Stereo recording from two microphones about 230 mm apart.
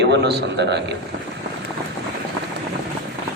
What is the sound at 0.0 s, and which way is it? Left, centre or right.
Speech, right.